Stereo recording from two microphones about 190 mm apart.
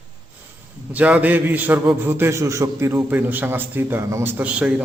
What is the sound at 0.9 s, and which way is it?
A man's voice, 5° right (ahead or behind).